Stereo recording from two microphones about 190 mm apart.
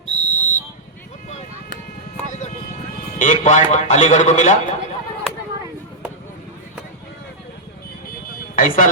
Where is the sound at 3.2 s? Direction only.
40° left (ahead or behind).